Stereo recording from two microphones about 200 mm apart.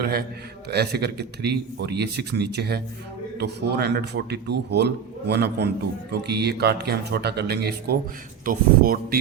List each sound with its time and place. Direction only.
0.0 s a man's voice: 50° right (ahead or behind)